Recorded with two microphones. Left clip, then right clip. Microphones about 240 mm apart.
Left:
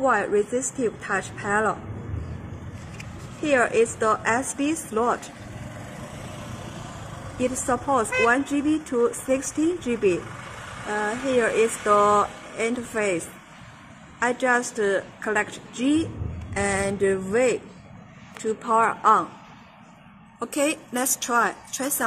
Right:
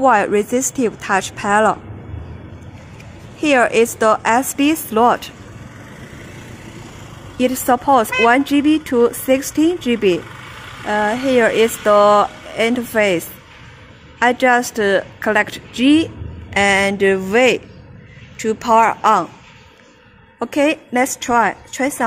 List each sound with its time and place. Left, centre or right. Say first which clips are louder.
0.0 s speech: right 8 dB; right
3.4 s speech: right 7 dB; right
7.3 s speech: right 9 dB; right
14.2 s speech: right 9 dB; right
20.3 s speech: right 8 dB; right